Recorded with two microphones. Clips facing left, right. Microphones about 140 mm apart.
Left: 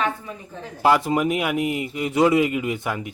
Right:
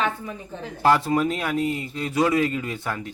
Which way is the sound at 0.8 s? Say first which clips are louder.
Left 1 dB; 15° left (ahead or behind).